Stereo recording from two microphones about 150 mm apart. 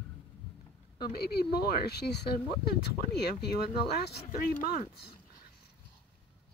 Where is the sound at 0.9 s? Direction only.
90° left.